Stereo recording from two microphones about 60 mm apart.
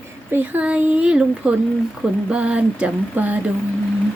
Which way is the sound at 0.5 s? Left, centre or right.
Right.